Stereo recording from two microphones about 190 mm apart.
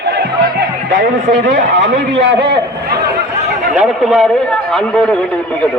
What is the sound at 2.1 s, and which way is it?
Speech, 65° right (ahead or behind).